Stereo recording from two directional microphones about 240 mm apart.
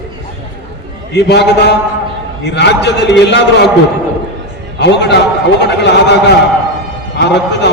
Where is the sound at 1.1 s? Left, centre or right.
Left.